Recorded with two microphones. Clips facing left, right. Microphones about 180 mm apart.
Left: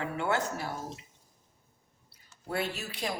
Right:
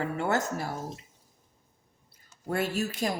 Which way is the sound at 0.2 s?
40° right (ahead or behind).